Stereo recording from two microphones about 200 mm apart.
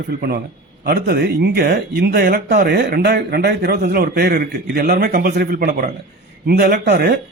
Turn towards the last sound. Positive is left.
turn(degrees=-55)  # may be behind; listen again after turning